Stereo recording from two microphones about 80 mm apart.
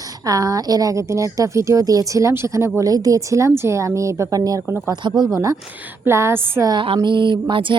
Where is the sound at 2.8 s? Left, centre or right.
Right.